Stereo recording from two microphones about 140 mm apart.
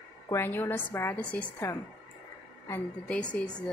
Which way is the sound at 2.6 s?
10° left (ahead or behind).